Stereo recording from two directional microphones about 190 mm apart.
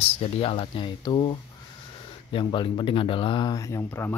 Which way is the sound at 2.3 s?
25° left (ahead or behind).